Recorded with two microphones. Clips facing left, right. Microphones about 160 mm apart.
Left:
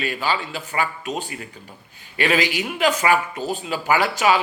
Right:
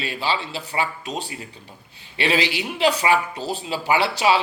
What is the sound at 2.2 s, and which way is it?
Speech, 30° right (ahead or behind).